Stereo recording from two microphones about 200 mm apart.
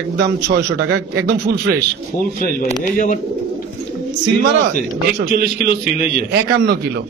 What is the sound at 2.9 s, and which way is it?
Speech, 40° left (ahead or behind).